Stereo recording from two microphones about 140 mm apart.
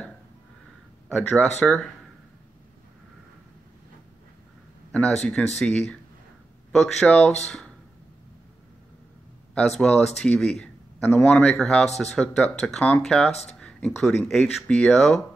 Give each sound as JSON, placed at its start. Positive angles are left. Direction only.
{"t": 1.0, "sound": "speech", "side_deg": 5}
{"t": 4.9, "sound": "speech", "side_deg": 5}
{"t": 9.6, "sound": "speech", "side_deg": 5}
{"t": 13.3, "sound": "speech", "side_deg": 50}
{"t": 13.6, "sound": "speech", "side_deg": 5}